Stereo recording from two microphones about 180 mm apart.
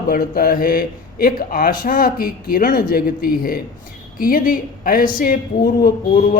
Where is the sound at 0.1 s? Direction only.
55° left (ahead or behind).